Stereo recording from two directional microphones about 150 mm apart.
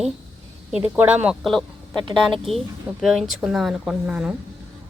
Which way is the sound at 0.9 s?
10° right (ahead or behind).